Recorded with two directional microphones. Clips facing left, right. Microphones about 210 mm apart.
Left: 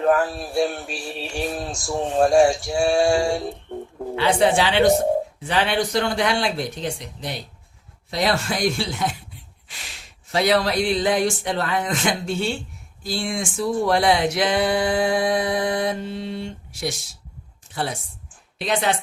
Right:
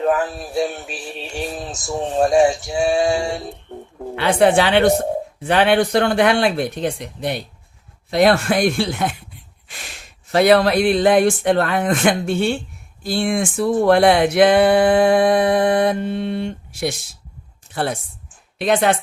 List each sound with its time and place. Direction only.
0.0 s male singing: centre (ahead or behind)
4.1 s speech: 60° right (ahead or behind)